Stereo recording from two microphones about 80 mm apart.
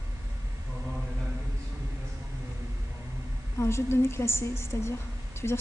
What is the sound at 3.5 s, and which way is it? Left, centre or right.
A woman's voice, left.